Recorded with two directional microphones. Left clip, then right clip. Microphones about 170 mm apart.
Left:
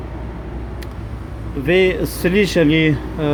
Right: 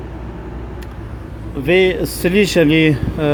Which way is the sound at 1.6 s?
10° right (ahead or behind).